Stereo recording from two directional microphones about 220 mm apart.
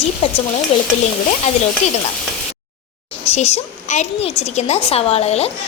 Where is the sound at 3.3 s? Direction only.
30° left (ahead or behind).